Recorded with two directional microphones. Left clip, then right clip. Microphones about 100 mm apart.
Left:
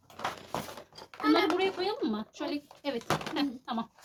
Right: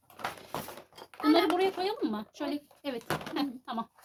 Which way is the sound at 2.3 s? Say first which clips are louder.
Even; 70° right (ahead or behind).